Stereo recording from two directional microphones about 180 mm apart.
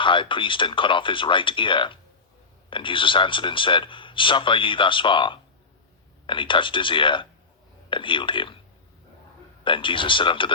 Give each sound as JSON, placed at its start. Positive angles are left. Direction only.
{"t": 0.0, "sound": "speech", "side_deg": 30}
{"t": 9.6, "sound": "speech", "side_deg": 30}